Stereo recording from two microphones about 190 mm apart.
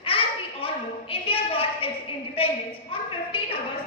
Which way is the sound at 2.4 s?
30° left (ahead or behind).